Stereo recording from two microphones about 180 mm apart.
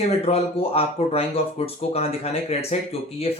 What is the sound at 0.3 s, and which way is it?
Speech, 35° left (ahead or behind).